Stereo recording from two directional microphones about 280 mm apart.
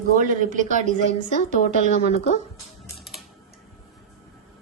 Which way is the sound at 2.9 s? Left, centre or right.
Centre.